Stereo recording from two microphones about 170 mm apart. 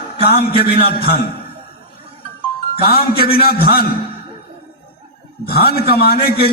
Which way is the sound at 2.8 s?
60° left (ahead or behind).